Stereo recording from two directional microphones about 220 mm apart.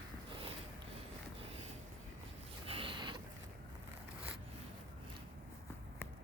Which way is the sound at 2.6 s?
25° right (ahead or behind).